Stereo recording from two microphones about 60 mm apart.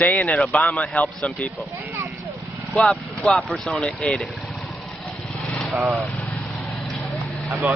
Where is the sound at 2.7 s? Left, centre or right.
Centre.